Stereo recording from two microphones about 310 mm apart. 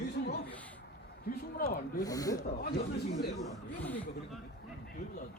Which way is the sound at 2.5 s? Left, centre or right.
Left.